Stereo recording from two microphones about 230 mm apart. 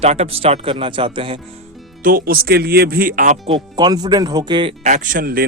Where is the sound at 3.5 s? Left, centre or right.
Centre; by 5.4 s right.